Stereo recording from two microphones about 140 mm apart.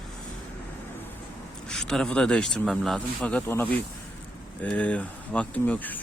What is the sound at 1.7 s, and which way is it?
Speech, 5° left (ahead or behind).